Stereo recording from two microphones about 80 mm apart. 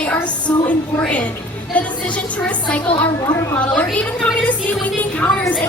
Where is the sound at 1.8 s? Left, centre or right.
Centre.